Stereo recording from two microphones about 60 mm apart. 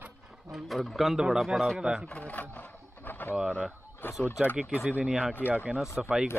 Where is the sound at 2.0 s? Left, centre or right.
Left.